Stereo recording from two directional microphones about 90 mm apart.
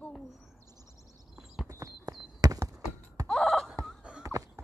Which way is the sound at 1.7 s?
40° right (ahead or behind).